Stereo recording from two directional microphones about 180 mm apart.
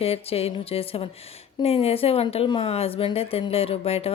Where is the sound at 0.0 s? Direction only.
35° left (ahead or behind).